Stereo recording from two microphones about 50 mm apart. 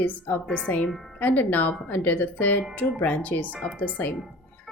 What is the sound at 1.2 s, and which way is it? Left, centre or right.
A woman's voice, left.